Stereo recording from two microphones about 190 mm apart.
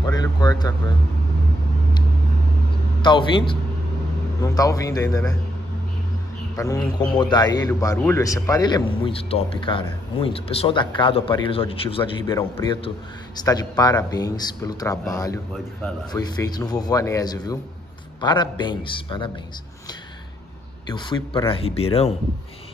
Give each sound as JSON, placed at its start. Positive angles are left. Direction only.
{"t": 0.0, "sound": "a sound", "side_deg": 20}
{"t": 3.0, "sound": "a man's voice", "side_deg": 25}
{"t": 6.5, "sound": "a man's voice", "side_deg": 15}
{"t": 13.4, "sound": "a man's voice", "side_deg": 20}
{"t": 20.9, "sound": "a man's voice", "side_deg": 25}